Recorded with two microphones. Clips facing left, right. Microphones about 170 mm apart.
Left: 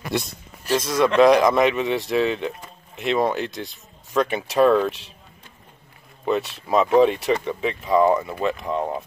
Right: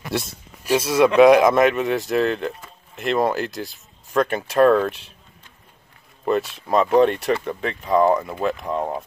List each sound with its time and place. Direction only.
0.0 s a man's voice: centre (ahead or behind)
6.2 s a man's voice: centre (ahead or behind)